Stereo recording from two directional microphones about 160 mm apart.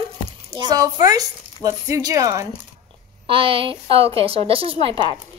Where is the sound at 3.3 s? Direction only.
35° right (ahead or behind).